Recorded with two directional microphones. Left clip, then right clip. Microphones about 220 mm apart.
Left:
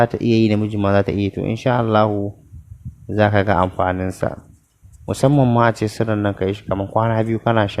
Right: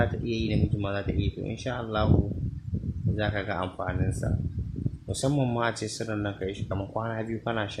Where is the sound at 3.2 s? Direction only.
35° left (ahead or behind).